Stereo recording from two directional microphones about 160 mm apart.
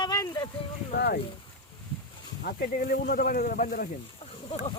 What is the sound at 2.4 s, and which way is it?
Speech, 70° left (ahead or behind).